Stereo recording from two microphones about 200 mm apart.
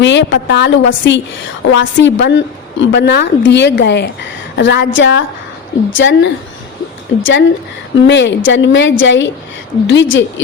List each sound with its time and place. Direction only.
0.0 s a woman's voice: 65° left (ahead or behind)
8.0 s a woman's voice: 65° left (ahead or behind)